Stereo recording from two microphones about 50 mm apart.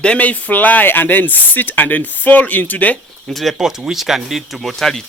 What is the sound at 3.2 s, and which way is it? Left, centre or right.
Speech, centre.